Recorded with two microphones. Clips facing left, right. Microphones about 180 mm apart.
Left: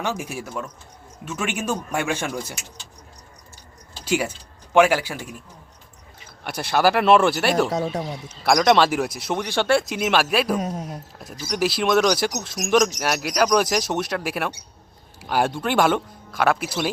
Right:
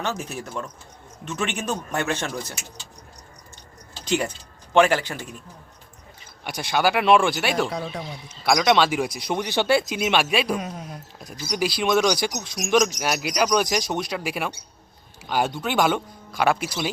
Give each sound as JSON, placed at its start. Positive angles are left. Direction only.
{"t": 0.0, "sound": "speech", "side_deg": 10}
{"t": 4.0, "sound": "speech", "side_deg": 5}
{"t": 6.4, "sound": "speech", "side_deg": 5}
{"t": 7.7, "sound": "speech", "side_deg": 45}
{"t": 8.4, "sound": "speech", "side_deg": 0}
{"t": 10.6, "sound": "speech", "side_deg": 40}
{"t": 11.2, "sound": "speech", "side_deg": 0}